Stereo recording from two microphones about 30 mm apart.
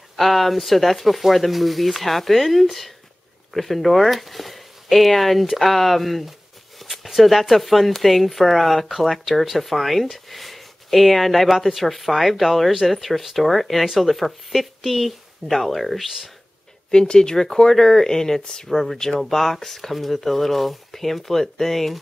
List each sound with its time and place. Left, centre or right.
0.1 s speech: centre
6.8 s a sound: centre
7.2 s speech: centre
17.1 s speech: left
18.4 s speech: left
18.7 s speech: centre